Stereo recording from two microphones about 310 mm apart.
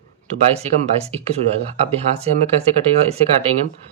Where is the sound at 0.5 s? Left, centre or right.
Centre.